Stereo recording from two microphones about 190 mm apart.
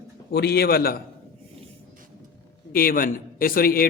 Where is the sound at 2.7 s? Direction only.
50° left (ahead or behind).